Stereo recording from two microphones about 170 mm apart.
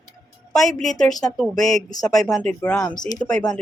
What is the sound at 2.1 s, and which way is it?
Speech, 5° left (ahead or behind).